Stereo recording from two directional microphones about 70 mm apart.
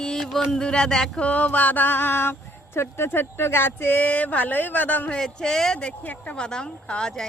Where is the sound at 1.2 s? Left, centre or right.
Left.